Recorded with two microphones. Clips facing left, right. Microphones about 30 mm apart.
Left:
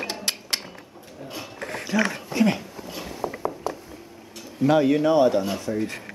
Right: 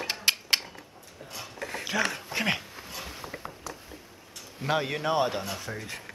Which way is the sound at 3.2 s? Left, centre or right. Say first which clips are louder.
Left 10 dB; left.